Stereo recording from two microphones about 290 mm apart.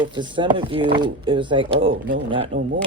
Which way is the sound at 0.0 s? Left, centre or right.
Centre.